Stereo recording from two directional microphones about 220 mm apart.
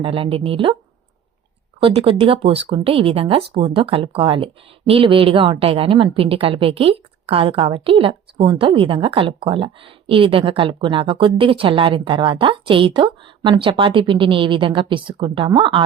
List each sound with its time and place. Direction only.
0.0 s a woman's voice: 25° right (ahead or behind)
1.8 s a woman's voice: 25° right (ahead or behind)